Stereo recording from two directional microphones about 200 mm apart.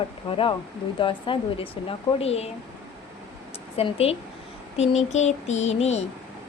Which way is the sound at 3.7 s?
30° left (ahead or behind).